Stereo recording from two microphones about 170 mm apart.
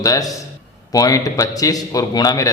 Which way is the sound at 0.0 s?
20° left (ahead or behind).